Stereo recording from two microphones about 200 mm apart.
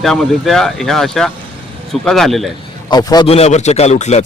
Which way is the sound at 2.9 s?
20° left (ahead or behind).